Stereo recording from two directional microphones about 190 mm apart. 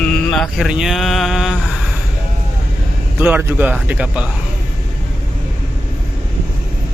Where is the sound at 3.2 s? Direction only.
10° right (ahead or behind).